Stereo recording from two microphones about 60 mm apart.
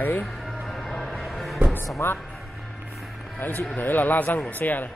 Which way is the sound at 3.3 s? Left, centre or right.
Left.